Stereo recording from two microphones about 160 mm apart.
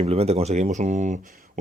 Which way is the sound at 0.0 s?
40° right (ahead or behind).